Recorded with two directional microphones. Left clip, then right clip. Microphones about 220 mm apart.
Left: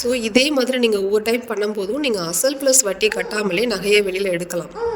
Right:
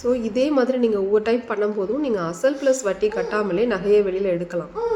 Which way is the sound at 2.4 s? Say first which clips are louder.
Even; 5° left (ahead or behind).